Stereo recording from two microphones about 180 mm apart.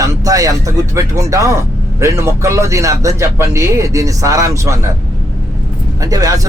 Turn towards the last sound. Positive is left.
turn(degrees=-20)  # may be behind; listen again after turning